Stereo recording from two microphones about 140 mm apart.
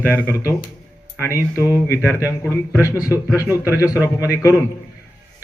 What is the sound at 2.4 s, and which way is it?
A man's voice, 20° left (ahead or behind).